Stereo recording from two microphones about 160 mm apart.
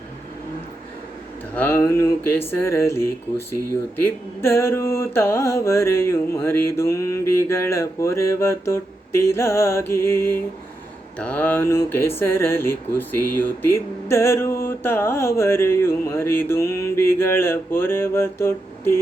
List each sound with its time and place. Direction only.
1.5 s speech: 15° left (ahead or behind)